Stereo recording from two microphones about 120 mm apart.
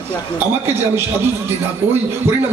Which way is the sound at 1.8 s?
20° right (ahead or behind).